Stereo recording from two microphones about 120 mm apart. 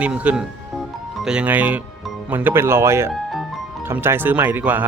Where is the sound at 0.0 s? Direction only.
10° right (ahead or behind).